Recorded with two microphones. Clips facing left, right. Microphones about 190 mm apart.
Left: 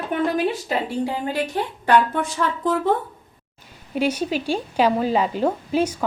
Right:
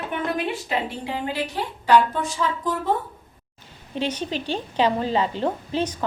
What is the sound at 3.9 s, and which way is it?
A woman's voice, 10° left (ahead or behind).